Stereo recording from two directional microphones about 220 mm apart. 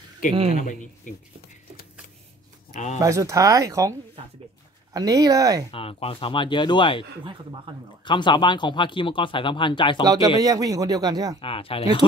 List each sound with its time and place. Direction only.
0.2 s speech: 40° left (ahead or behind)
2.7 s speech: 30° left (ahead or behind)
3.0 s speech: 15° right (ahead or behind)
5.7 s speech: 25° left (ahead or behind)
10.0 s speech: 15° right (ahead or behind)
11.4 s speech: 25° left (ahead or behind)